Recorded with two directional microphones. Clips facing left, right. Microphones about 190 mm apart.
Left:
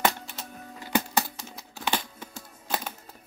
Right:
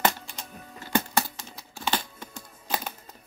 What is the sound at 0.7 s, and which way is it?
Music, 15° left (ahead or behind).